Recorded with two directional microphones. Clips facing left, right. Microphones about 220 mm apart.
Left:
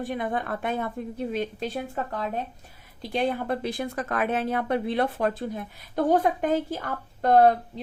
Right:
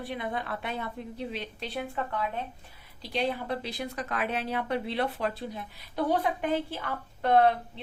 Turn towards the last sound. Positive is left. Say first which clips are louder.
# left 4 dB
turn(degrees=40)  # may be behind; listen again after turning